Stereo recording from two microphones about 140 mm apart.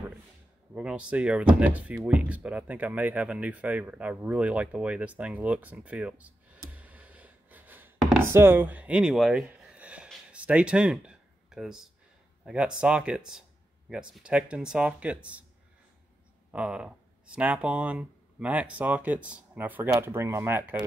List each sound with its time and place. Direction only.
0.7 s speech: 5° right (ahead or behind)
8.2 s a sound: 15° right (ahead or behind)
12.4 s speech: 5° right (ahead or behind)
16.5 s speech: 5° right (ahead or behind)